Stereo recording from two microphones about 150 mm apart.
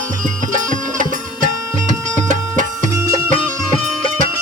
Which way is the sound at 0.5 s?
60° right (ahead or behind).